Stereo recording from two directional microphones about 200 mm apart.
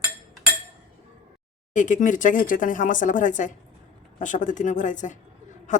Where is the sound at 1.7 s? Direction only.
40° left (ahead or behind).